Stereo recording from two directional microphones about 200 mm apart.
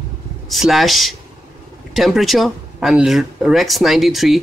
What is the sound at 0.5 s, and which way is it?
Speech, centre (ahead or behind).